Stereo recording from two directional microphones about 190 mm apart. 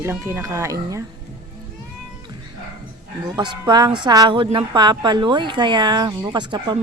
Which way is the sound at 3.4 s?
25° right (ahead or behind).